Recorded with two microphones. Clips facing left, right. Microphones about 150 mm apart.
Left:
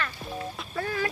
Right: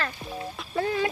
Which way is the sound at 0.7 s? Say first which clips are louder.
Right 4 dB; 20° right (ahead or behind).